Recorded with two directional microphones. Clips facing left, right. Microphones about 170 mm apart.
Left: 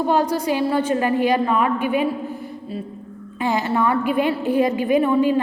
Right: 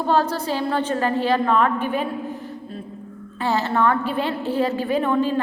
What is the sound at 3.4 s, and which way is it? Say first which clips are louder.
A woman's voice: even; 15° left (ahead or behind).